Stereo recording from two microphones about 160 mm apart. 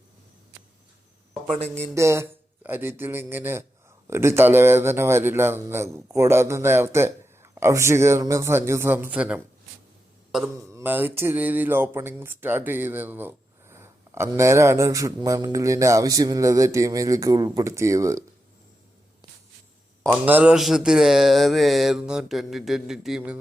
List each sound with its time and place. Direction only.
1.6 s speech: 10° left (ahead or behind)
2.0 s a man's voice: 15° right (ahead or behind)
10.5 s speech: 20° right (ahead or behind)
20.1 s speech: 10° right (ahead or behind)